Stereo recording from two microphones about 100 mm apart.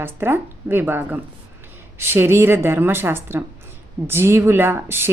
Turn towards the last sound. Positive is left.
turn(degrees=-25)  # may be behind; listen again after turning